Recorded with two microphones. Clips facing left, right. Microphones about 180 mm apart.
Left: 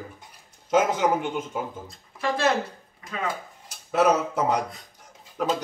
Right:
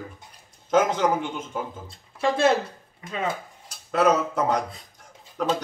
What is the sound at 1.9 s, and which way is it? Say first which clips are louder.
Speech: right 3 dB; 25° right (ahead or behind).